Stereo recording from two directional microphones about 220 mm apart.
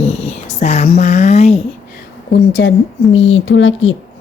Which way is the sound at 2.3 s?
50° left (ahead or behind).